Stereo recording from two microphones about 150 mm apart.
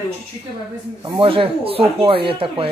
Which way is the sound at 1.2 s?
35° right (ahead or behind).